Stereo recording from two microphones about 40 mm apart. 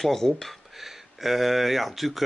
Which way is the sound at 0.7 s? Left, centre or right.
Centre.